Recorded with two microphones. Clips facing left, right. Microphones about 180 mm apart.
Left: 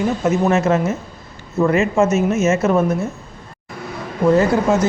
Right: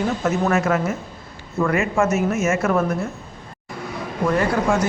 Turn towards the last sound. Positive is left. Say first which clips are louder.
# left 5 dB
turn(degrees=25)  # may be behind; listen again after turning